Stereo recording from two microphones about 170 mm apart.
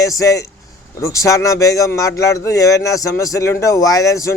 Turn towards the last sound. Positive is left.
turn(degrees=20)  # may be behind; listen again after turning